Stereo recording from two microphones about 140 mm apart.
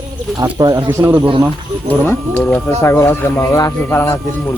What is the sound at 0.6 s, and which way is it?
Speech, 25° right (ahead or behind).